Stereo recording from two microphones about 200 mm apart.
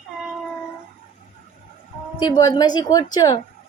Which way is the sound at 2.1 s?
20° left (ahead or behind).